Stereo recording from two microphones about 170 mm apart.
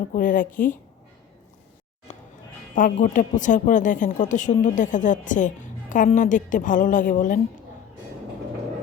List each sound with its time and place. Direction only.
0.1 s a woman's voice: 50° left (ahead or behind)
2.1 s music: 50° left (ahead or behind)
2.7 s a woman's voice: 50° left (ahead or behind)